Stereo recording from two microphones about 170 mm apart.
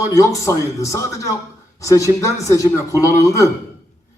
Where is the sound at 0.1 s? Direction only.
20° left (ahead or behind).